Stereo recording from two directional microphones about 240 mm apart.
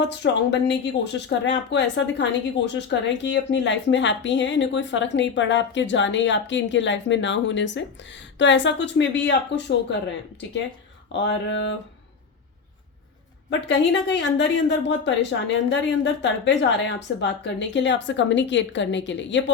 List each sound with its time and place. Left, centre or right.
0.2 s speech: left
11.1 s speech: left
13.5 s speech: left